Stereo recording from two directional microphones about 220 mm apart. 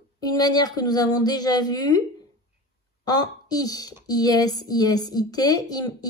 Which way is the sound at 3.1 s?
20° left (ahead or behind).